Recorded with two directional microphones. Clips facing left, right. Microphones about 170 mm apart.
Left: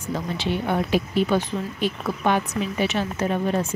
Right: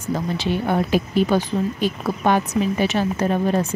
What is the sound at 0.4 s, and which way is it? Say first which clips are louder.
Speech: right 2 dB; 40° right (ahead or behind).